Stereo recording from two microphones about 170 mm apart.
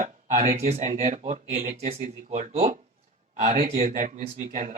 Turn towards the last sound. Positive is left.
turn(degrees=-45)  # may be behind; listen again after turning